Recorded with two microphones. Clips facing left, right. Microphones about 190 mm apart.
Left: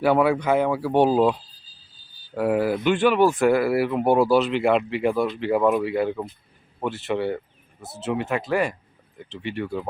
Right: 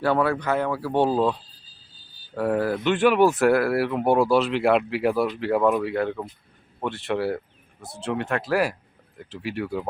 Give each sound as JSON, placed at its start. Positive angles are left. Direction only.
{"t": 0.0, "sound": "speech", "side_deg": 10}
{"t": 3.0, "sound": "speech", "side_deg": -5}